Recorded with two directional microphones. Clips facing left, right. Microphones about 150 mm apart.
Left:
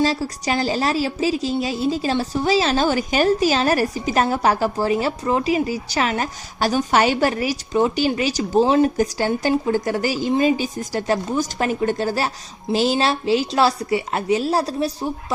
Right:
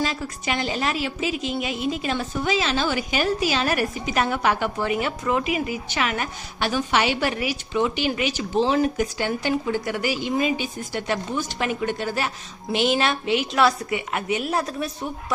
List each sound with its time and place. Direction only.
0.0 s a woman's voice: 35° left (ahead or behind)